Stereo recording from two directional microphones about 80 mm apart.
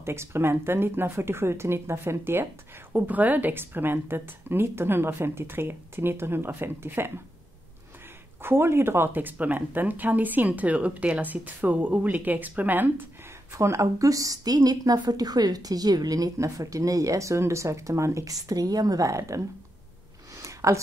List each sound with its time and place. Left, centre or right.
0.0 s speech: right
2.9 s speech: right
8.4 s speech: right
13.5 s speech: right
20.3 s a sound: right